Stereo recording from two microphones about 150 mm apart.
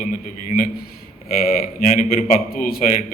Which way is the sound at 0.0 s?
60° left (ahead or behind).